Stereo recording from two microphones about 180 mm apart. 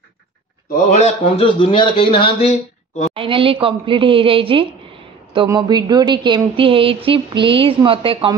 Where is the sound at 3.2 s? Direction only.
30° right (ahead or behind).